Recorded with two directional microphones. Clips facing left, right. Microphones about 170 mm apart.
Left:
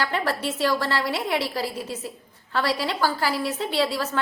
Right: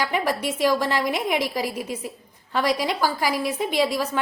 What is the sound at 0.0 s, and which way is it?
A woman's voice, 15° right (ahead or behind).